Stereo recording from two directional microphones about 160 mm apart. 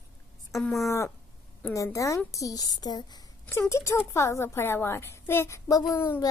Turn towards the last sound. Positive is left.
turn(degrees=15)  # may be behind; listen again after turning